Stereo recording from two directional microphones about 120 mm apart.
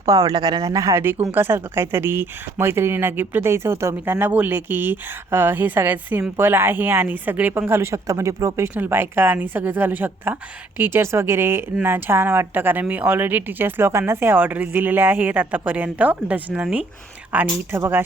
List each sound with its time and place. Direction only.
0.0 s a woman's voice: 25° right (ahead or behind); by 16.8 s 10° right (ahead or behind)
17.3 s speech: 20° right (ahead or behind)